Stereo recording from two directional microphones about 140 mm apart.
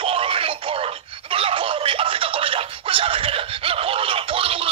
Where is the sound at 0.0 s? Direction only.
40° right (ahead or behind).